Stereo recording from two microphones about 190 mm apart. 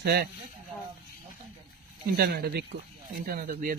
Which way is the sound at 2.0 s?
55° right (ahead or behind).